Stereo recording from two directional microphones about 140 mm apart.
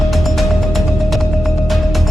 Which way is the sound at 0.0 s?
Centre (ahead or behind).